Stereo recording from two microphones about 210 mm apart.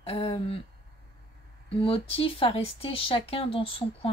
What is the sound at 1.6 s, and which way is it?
Speech, 25° left (ahead or behind).